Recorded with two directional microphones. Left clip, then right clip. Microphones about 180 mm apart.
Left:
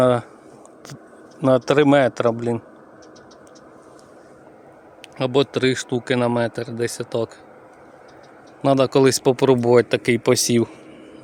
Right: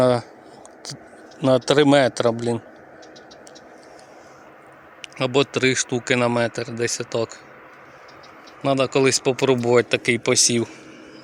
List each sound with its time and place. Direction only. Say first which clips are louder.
0.0 s speech: left 1 dB; 10° left (ahead or behind)
1.4 s speech: left 1 dB; 10° left (ahead or behind)
5.0 s speech: left 1 dB; 15° left (ahead or behind)
8.6 s speech: left 3 dB; 35° left (ahead or behind)